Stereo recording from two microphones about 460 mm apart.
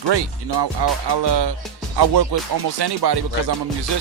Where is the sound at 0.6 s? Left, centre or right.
Right.